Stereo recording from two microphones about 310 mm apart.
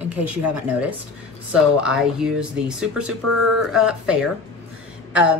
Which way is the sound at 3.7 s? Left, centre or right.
Centre.